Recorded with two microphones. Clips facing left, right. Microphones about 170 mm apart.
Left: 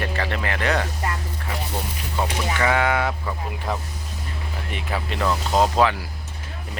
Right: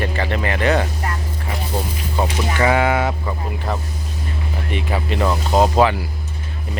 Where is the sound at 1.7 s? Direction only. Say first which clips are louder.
Right 5 dB; 30° right (ahead or behind).